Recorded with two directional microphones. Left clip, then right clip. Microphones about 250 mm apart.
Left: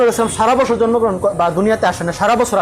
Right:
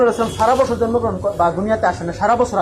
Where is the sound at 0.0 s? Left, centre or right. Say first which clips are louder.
Left 2 dB; left.